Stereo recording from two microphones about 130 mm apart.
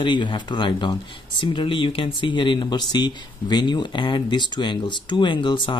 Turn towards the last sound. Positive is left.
turn(degrees=40)  # may be behind; listen again after turning